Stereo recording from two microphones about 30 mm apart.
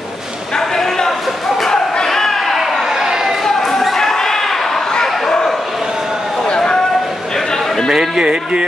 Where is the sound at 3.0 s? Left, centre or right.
Centre.